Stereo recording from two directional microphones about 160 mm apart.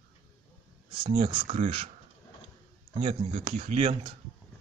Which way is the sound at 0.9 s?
30° right (ahead or behind).